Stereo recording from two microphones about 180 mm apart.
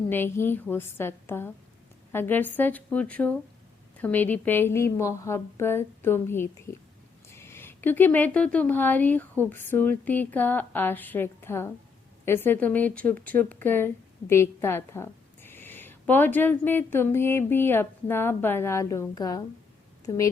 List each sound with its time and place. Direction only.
0.1 s a woman's voice: 15° left (ahead or behind)
7.3 s a sound: 15° left (ahead or behind)
8.5 s a woman's voice: 10° left (ahead or behind)